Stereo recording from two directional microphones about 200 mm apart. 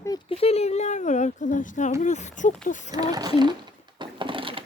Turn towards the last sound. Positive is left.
turn(degrees=-25)  # may be behind; listen again after turning